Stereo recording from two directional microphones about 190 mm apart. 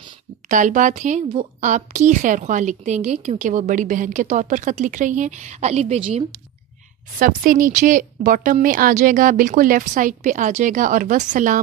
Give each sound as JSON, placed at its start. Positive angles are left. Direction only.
{"t": 0.5, "sound": "a woman's voice", "side_deg": -40}
{"t": 7.2, "sound": "speech", "side_deg": -50}